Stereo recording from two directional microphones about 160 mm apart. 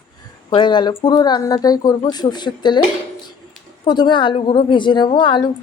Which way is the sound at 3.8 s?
30° left (ahead or behind).